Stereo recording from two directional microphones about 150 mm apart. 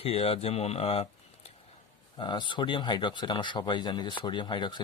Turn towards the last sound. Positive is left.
turn(degrees=30)  # may be behind; listen again after turning